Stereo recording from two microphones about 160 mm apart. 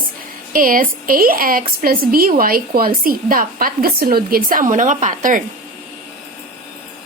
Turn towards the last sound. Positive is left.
turn(degrees=-55)  # may be behind; listen again after turning